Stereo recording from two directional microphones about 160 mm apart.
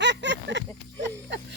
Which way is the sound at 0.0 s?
90° right.